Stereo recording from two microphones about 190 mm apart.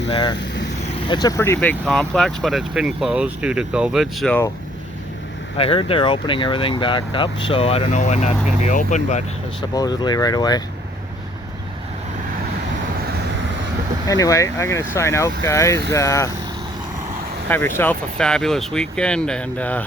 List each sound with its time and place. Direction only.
0.1 s speech: 25° left (ahead or behind)
1.8 s speech: centre (ahead or behind)
5.5 s speech: 30° left (ahead or behind)
9.7 s speech: 20° left (ahead or behind)
14.1 s speech: 15° left (ahead or behind)
17.5 s speech: 10° left (ahead or behind)